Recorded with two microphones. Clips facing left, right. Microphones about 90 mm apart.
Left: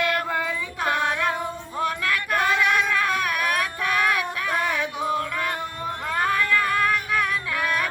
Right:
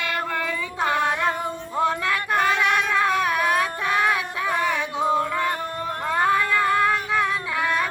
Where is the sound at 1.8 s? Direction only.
25° right (ahead or behind).